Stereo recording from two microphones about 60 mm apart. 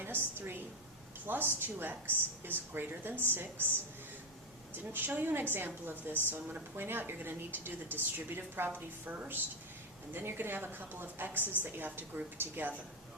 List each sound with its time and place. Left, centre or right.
0.0 s a woman's voice: right
4.7 s a woman's voice: right